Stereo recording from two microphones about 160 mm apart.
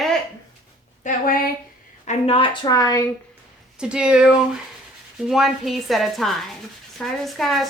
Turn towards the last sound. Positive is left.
turn(degrees=0)  # may be behind; listen again after turning